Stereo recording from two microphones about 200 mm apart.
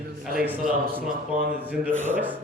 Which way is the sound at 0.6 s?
45° right (ahead or behind).